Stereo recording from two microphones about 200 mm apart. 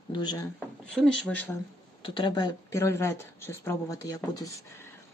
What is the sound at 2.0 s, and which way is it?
Speech, 25° left (ahead or behind).